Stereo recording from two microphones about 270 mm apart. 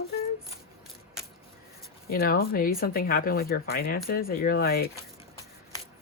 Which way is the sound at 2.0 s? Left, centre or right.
Left.